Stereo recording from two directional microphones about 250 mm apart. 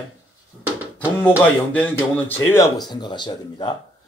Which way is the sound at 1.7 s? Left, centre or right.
Centre.